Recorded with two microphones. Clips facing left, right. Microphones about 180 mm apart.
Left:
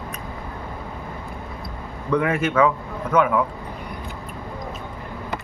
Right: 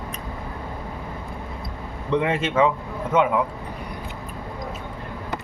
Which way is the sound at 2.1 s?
25° right (ahead or behind).